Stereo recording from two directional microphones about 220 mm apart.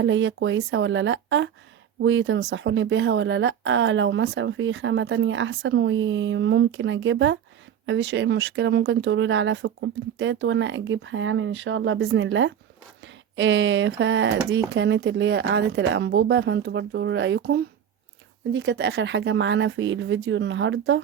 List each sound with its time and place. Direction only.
0.0 s speech: 55° right (ahead or behind)